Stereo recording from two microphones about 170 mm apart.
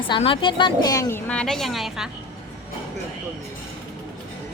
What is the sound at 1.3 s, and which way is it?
Speech, 5° left (ahead or behind).